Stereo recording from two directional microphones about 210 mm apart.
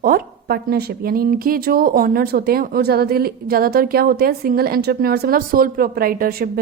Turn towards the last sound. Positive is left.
turn(degrees=-45)  # may be behind; listen again after turning